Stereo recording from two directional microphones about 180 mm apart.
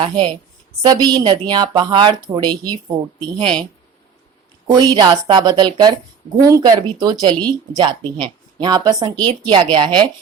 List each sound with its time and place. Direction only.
0.0 s speech: 25° right (ahead or behind)
3.4 s speech: 5° left (ahead or behind)
4.7 s speech: 20° right (ahead or behind)